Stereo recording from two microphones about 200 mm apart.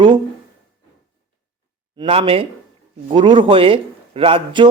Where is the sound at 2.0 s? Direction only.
30° right (ahead or behind).